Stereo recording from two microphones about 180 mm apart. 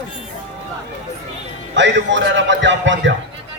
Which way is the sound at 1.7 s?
80° right.